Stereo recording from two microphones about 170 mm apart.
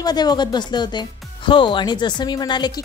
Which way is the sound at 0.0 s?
25° left (ahead or behind).